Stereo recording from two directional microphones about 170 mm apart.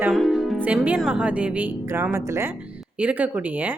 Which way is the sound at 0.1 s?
Centre (ahead or behind).